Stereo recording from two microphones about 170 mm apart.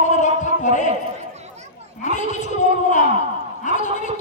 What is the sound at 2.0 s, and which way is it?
A man's voice, 45° left (ahead or behind).